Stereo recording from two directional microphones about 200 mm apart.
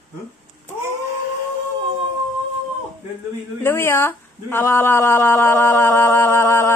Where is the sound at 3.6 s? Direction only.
10° left (ahead or behind).